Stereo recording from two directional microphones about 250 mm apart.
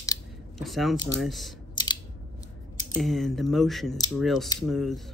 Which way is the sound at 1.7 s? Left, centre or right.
Centre.